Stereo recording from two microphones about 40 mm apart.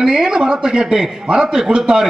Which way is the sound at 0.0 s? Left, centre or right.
Right.